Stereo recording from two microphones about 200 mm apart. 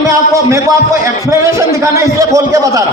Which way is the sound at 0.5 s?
15° right (ahead or behind).